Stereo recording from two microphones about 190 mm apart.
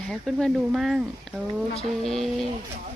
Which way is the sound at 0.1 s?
5° left (ahead or behind).